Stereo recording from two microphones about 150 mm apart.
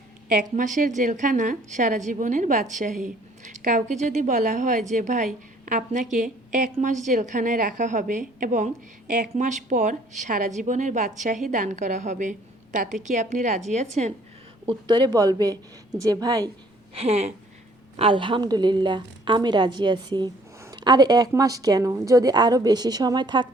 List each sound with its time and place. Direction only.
0.5 s a woman's voice: 60° right (ahead or behind)
14.7 s a woman's voice: 30° right (ahead or behind)
16.9 s a woman's voice: 45° right (ahead or behind)